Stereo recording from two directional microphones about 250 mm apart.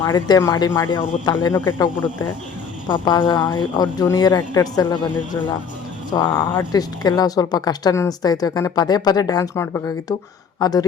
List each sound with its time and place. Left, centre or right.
0.0 s speech: centre
6.1 s speech: centre